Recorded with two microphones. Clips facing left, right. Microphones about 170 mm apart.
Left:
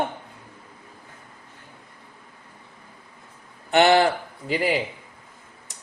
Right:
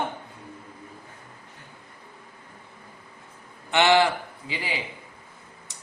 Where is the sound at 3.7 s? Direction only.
40° left (ahead or behind).